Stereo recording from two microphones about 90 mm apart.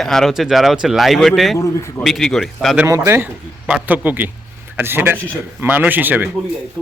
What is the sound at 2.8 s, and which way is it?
Speech, 35° right (ahead or behind).